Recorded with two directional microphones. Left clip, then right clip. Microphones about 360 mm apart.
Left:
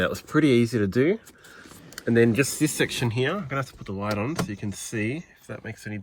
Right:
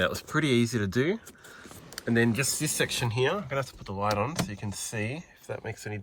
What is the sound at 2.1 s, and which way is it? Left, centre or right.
Speech, centre.